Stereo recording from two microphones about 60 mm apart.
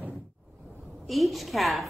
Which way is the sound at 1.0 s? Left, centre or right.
Centre.